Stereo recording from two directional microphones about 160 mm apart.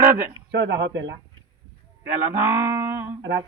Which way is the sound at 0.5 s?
90° right.